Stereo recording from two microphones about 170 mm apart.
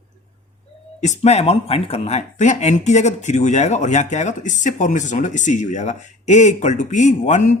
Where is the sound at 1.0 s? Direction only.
40° left (ahead or behind).